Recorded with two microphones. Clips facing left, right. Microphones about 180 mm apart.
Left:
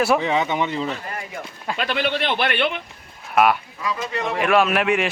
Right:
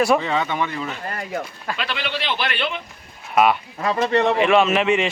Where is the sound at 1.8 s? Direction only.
50° left (ahead or behind).